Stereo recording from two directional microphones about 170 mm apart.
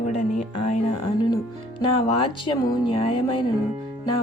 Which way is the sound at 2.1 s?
35° left (ahead or behind).